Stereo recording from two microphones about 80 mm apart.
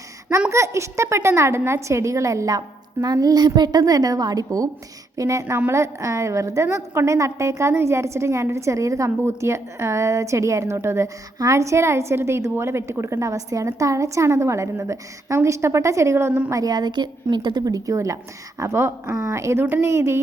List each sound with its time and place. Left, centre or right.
0.5 s a woman's voice: right
2.6 s a woman's voice: right
16.6 s a woman's voice: right